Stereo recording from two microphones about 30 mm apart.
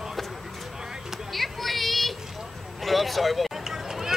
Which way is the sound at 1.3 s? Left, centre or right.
Centre.